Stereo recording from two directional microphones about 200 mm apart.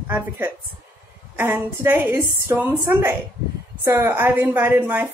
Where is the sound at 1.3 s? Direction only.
10° right (ahead or behind).